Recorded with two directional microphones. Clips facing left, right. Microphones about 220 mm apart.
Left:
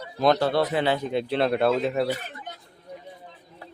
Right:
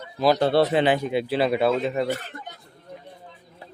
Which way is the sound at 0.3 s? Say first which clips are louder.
Right 4 dB; 25° right (ahead or behind).